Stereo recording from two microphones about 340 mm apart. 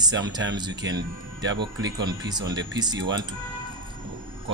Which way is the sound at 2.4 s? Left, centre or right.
Right.